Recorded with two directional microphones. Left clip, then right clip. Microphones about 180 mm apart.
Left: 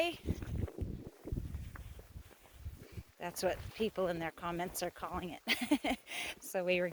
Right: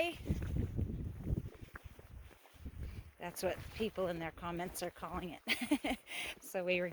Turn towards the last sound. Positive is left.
turn(degrees=10)  # may be behind; listen again after turning